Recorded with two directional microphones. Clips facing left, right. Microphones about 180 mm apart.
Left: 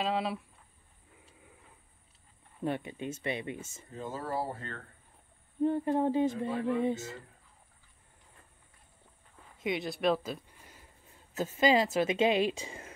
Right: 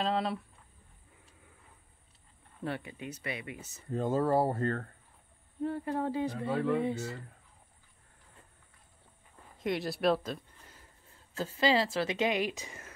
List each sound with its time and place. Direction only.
0.0 s speech: 5° left (ahead or behind)
2.6 s a woman's voice: 20° left (ahead or behind)
3.9 s speech: 55° right (ahead or behind)
5.6 s a woman's voice: 20° left (ahead or behind)
9.6 s speech: centre (ahead or behind)
11.3 s a woman's voice: 20° left (ahead or behind)